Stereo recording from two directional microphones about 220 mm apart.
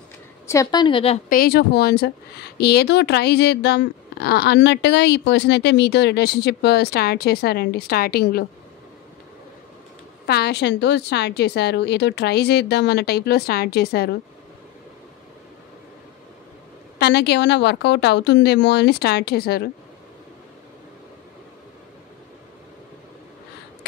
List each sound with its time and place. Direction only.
0.5 s a woman's voice: 15° left (ahead or behind)
1.3 s speech: 45° left (ahead or behind)
10.2 s speech: 50° left (ahead or behind)
17.0 s speech: 50° left (ahead or behind)